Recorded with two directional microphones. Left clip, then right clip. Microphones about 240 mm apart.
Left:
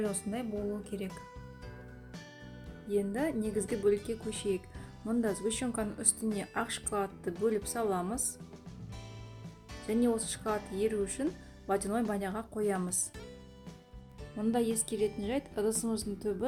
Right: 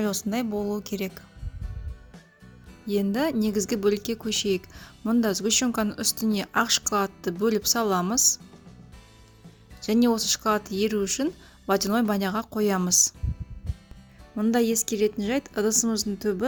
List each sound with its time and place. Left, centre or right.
0.0 s a woman's voice: right
2.9 s a woman's voice: right
9.8 s speech: right
14.3 s speech: right